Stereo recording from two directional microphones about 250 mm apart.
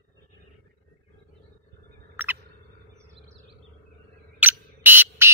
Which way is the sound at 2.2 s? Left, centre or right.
Centre.